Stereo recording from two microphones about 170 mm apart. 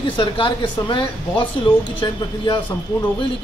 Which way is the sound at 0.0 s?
30° left (ahead or behind).